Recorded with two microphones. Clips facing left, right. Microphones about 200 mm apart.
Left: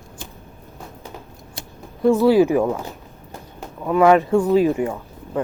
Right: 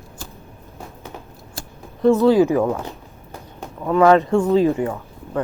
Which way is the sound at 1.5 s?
5° left (ahead or behind).